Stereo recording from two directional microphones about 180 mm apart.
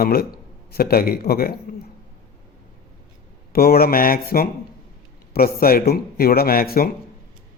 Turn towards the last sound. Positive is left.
turn(degrees=55)  # may be behind; listen again after turning